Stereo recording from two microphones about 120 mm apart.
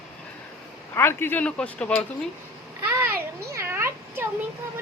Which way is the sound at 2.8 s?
15° right (ahead or behind).